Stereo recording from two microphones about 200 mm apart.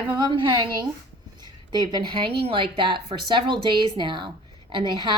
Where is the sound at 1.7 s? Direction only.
20° right (ahead or behind).